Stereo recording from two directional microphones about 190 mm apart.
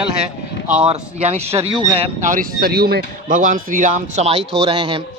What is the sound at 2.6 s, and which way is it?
Speech, 55° right (ahead or behind).